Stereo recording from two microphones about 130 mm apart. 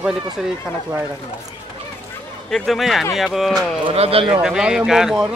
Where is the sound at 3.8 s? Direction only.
50° right (ahead or behind).